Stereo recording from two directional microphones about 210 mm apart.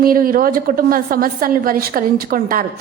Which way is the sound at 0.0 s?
40° right (ahead or behind).